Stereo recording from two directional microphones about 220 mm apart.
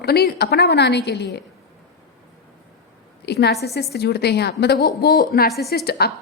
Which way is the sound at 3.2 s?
50° left (ahead or behind).